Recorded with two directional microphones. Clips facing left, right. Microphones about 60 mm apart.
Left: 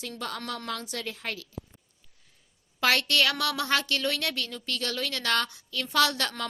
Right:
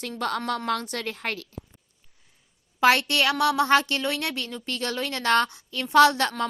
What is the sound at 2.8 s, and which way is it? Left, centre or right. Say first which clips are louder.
A woman's voice: right 4 dB; right.